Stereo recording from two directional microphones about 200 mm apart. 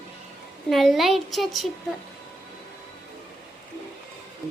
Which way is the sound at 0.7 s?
Centre (ahead or behind).